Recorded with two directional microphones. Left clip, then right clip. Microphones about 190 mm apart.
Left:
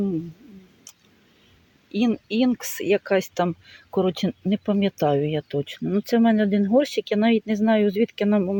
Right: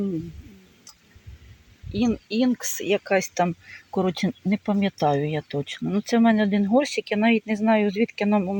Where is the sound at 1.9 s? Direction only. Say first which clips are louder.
Left 1 dB; 10° left (ahead or behind).